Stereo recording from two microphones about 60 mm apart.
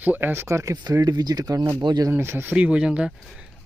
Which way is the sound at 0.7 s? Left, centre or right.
Right.